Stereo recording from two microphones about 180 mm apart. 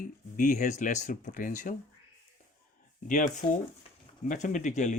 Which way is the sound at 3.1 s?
45° left (ahead or behind).